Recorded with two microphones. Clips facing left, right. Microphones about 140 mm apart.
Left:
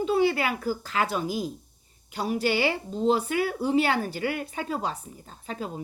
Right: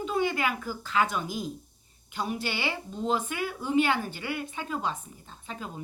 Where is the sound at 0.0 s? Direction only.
35° left (ahead or behind).